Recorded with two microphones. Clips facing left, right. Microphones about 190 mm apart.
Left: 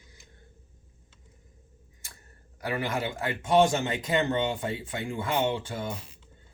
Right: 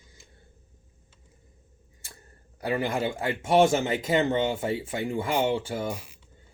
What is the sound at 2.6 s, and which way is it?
Speech, 30° right (ahead or behind).